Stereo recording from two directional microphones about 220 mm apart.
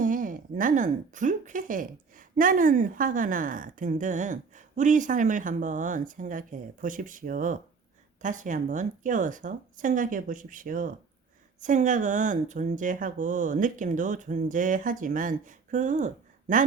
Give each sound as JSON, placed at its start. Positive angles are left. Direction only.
{"t": 0.0, "sound": "a woman's voice", "side_deg": -35}